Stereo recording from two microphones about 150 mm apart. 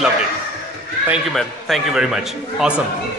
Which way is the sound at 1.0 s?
5° right (ahead or behind).